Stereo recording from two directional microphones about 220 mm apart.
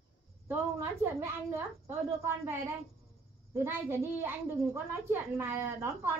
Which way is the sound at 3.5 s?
10° right (ahead or behind).